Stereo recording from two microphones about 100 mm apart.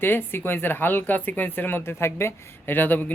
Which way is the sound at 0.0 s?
20° left (ahead or behind).